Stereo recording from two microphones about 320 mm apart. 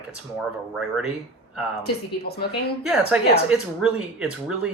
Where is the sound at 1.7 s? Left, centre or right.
Left.